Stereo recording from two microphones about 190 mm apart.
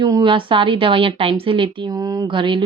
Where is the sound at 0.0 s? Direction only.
25° right (ahead or behind).